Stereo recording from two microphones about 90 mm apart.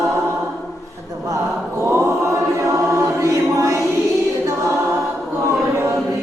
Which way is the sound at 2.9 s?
35° right (ahead or behind).